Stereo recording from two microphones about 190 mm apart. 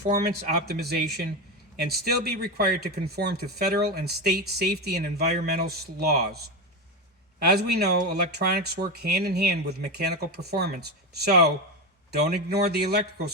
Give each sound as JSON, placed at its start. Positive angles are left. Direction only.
{"t": 0.5, "sound": "speech", "side_deg": -55}
{"t": 7.4, "sound": "speech", "side_deg": -55}